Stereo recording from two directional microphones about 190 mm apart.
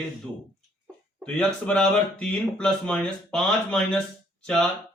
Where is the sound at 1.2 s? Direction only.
5° left (ahead or behind).